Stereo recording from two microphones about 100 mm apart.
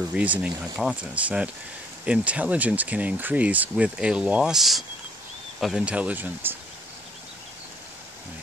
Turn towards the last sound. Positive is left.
turn(degrees=-20)  # may be behind; listen again after turning